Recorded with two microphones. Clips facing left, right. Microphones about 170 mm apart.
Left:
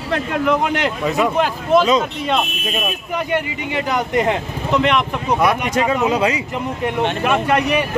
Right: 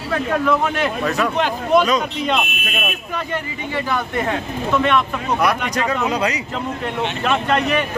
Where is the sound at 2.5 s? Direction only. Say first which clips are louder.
Left 3 dB; 30° left (ahead or behind).